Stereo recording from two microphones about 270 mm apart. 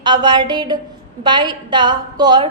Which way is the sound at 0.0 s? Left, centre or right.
Centre.